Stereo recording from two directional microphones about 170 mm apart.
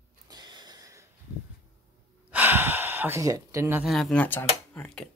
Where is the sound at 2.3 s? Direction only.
10° right (ahead or behind).